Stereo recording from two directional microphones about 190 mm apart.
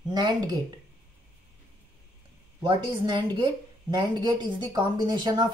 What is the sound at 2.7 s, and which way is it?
A woman's voice, 25° right (ahead or behind).